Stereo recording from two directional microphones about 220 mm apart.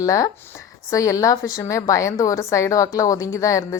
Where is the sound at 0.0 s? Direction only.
15° left (ahead or behind).